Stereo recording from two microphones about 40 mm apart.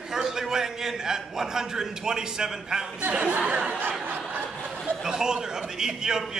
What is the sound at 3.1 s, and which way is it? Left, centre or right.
Speech, right.